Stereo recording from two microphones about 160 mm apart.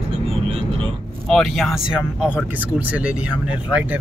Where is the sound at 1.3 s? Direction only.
Centre (ahead or behind).